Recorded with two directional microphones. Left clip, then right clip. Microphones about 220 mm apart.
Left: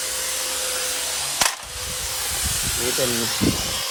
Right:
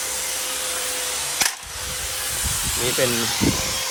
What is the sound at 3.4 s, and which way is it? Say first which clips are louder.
Speech: even; 25° right (ahead or behind).